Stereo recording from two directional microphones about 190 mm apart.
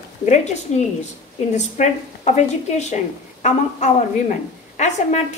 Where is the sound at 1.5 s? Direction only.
40° left (ahead or behind).